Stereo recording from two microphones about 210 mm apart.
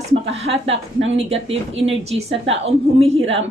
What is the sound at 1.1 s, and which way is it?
A woman's voice, 30° right (ahead or behind).